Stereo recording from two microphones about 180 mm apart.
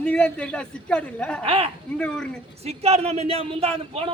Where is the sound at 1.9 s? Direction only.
5° left (ahead or behind).